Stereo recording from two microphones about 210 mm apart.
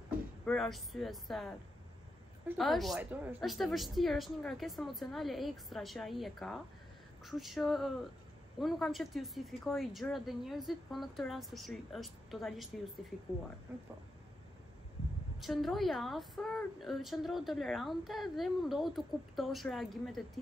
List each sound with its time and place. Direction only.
0.5 s a woman's voice: centre (ahead or behind)
2.5 s a woman's voice: centre (ahead or behind)
13.7 s a woman's voice: 5° right (ahead or behind)
15.4 s a woman's voice: centre (ahead or behind)